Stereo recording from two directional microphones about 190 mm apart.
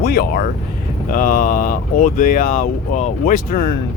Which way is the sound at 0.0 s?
55° left (ahead or behind).